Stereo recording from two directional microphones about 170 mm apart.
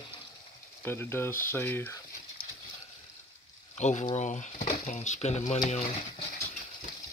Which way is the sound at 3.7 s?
40° left (ahead or behind).